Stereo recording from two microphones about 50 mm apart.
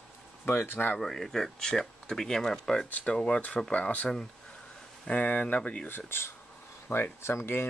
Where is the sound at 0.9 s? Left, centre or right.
Centre.